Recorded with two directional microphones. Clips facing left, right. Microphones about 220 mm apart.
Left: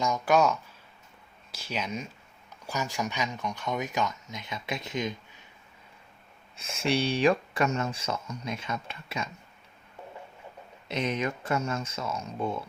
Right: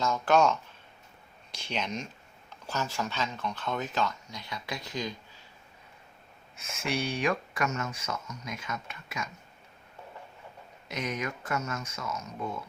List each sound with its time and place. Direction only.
0.0 s speech: 15° left (ahead or behind)
6.6 s speech: 30° left (ahead or behind)
10.8 s speech: 25° left (ahead or behind)